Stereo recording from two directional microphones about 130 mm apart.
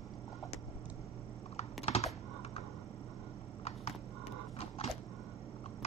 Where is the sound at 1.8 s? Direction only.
55° left (ahead or behind).